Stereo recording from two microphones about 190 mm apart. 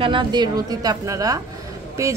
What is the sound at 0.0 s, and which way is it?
A woman's voice, 25° right (ahead or behind).